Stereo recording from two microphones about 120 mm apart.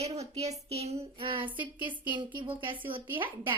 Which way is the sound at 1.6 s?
15° right (ahead or behind).